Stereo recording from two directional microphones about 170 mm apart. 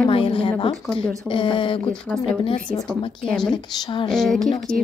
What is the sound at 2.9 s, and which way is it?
Speech, 5° left (ahead or behind).